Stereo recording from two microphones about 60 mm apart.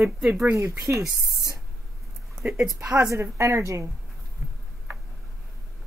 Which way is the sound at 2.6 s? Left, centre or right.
Right.